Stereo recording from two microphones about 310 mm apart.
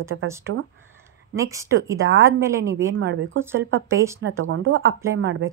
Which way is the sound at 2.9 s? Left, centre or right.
Right.